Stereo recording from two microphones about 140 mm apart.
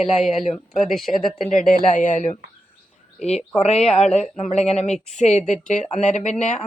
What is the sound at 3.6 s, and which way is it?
Speech, 50° left (ahead or behind).